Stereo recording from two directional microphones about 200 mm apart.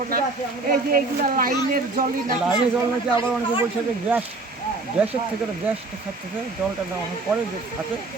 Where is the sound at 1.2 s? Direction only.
45° right (ahead or behind).